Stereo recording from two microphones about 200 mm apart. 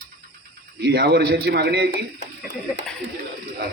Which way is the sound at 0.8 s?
55° right (ahead or behind).